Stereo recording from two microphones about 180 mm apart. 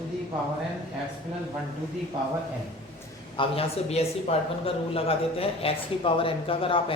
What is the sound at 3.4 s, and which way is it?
Speech, 35° left (ahead or behind).